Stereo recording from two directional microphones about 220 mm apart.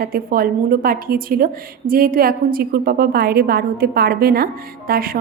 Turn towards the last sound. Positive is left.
turn(degrees=-40)  # may be behind; listen again after turning